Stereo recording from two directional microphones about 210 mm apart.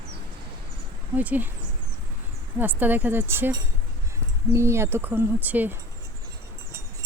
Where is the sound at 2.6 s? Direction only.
10° right (ahead or behind).